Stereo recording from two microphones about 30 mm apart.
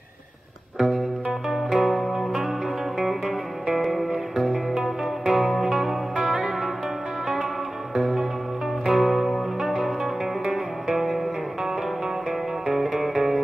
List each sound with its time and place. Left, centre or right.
0.7 s music: centre
4.4 s music: centre
7.9 s music: centre
10.4 s music: centre
12.6 s music: centre